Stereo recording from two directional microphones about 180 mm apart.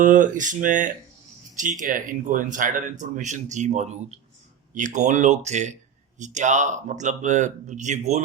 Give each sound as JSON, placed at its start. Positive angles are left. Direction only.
{"t": 0.0, "sound": "speech", "side_deg": -45}